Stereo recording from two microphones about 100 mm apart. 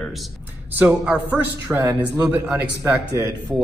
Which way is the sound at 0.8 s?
15° right (ahead or behind).